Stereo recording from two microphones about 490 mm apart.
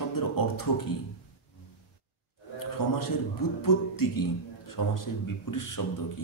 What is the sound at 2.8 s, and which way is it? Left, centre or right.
A man's voice, left.